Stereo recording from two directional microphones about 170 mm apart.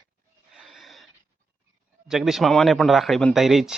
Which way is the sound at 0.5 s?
Centre (ahead or behind).